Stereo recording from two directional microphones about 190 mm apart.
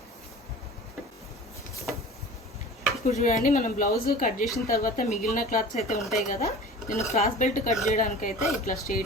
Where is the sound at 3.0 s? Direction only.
40° left (ahead or behind).